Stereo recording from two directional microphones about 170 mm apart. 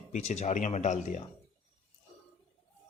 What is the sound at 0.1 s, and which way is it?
Speech, 40° left (ahead or behind).